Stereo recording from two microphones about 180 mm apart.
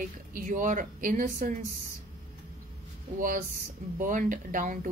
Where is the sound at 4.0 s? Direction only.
45° right (ahead or behind).